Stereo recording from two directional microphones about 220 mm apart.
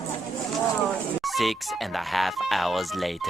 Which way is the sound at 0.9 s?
Centre (ahead or behind).